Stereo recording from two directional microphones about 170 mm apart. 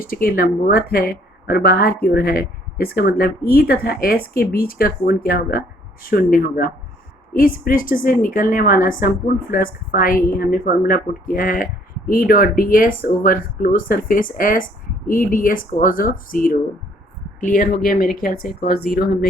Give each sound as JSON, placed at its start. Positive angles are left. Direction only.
{"t": 0.0, "sound": "speech", "side_deg": 60}